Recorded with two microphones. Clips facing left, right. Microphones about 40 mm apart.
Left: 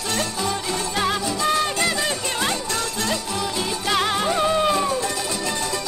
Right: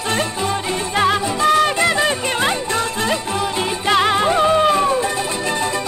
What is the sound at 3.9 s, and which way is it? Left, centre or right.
Music, right.